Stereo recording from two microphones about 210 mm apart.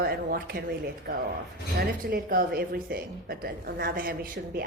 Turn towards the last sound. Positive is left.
turn(degrees=-45)  # may be behind; listen again after turning